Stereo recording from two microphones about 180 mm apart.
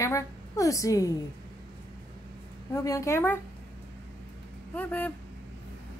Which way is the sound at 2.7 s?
15° left (ahead or behind).